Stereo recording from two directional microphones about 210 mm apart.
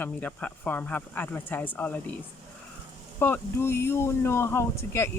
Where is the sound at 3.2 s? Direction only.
10° left (ahead or behind).